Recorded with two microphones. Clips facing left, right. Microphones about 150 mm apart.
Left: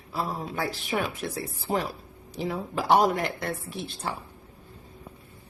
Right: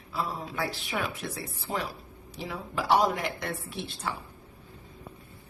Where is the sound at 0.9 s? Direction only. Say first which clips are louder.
Left 4 dB; 35° left (ahead or behind).